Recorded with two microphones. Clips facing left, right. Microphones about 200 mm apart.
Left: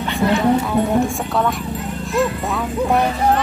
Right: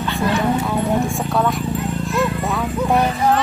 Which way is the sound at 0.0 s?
20° left (ahead or behind).